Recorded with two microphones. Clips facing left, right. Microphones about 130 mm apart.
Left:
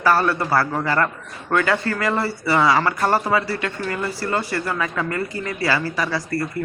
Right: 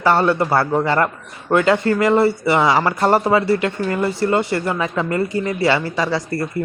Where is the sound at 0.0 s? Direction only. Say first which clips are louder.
Right 3 dB; 25° right (ahead or behind).